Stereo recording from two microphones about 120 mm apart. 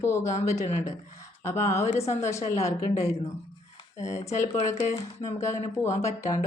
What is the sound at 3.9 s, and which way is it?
Speech, 75° left (ahead or behind).